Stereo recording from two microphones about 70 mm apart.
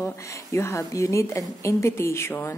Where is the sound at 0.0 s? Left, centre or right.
Left.